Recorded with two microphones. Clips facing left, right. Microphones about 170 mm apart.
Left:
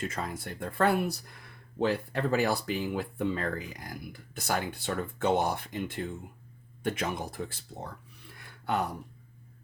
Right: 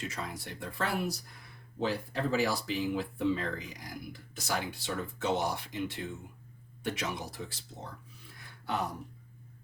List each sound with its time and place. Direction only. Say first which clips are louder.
0.0 s speech: left 4 dB; 50° left (ahead or behind)